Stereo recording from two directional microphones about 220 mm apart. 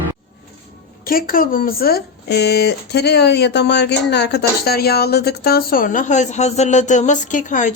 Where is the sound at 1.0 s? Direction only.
40° left (ahead or behind).